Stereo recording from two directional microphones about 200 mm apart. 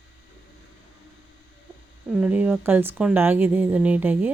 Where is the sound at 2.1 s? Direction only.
5° right (ahead or behind).